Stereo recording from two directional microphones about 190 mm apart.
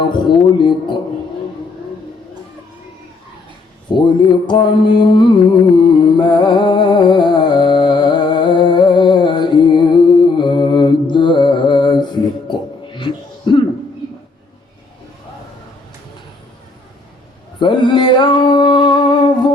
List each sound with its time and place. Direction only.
0.1 s music: 25° left (ahead or behind)
3.8 s mantra: 25° left (ahead or behind)
11.1 s music: 25° left (ahead or behind)
17.6 s a sound: 25° left (ahead or behind)